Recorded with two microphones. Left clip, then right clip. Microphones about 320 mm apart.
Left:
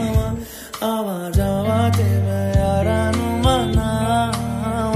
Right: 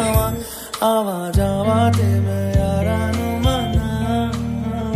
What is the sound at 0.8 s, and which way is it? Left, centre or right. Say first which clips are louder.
Music: right 5 dB; centre.